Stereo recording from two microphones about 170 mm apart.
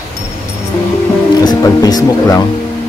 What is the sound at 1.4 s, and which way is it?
Speech, 20° left (ahead or behind).